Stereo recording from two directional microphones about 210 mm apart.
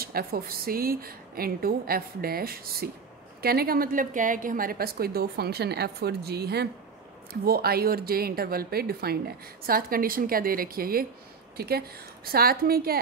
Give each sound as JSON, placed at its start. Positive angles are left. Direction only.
{"t": 0.0, "sound": "a woman's voice", "side_deg": -45}